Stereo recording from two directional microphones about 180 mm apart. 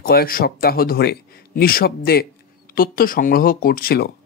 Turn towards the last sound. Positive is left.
turn(degrees=60)  # may be behind; listen again after turning